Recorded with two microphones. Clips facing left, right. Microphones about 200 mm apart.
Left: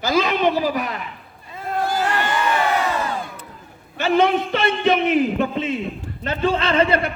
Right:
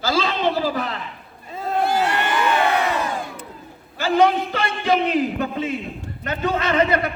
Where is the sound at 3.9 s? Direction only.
25° left (ahead or behind).